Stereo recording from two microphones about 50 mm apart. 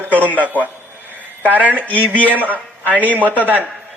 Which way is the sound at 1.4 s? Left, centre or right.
Right.